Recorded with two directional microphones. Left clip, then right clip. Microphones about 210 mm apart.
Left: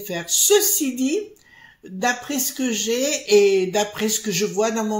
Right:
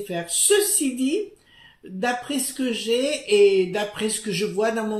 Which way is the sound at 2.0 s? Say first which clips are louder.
Left 2 dB; 35° left (ahead or behind).